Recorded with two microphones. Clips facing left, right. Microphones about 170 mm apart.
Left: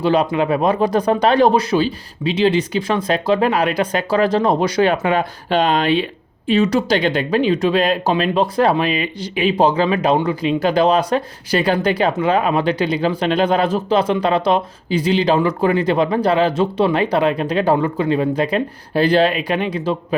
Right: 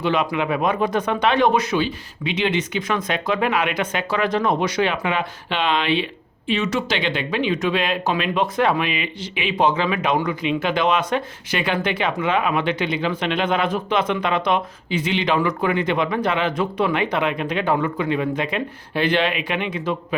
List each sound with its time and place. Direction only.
0.0 s speech: 35° left (ahead or behind)